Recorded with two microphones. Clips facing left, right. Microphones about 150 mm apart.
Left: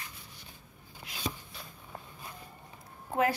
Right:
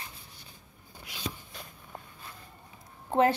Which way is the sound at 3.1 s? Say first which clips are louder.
Right 5 dB; 25° right (ahead or behind).